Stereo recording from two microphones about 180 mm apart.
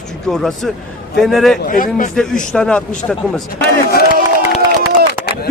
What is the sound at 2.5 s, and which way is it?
Speech, 5° left (ahead or behind).